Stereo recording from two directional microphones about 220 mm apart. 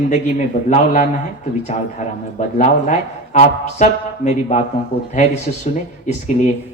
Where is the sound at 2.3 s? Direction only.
35° left (ahead or behind).